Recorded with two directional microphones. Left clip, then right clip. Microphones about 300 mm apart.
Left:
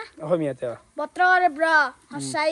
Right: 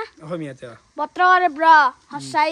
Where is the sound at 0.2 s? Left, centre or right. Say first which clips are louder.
Left 7 dB; centre.